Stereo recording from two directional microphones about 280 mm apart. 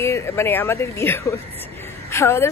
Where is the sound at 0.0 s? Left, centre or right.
Centre.